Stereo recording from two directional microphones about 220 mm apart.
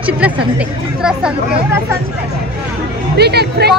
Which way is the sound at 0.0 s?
5° right (ahead or behind).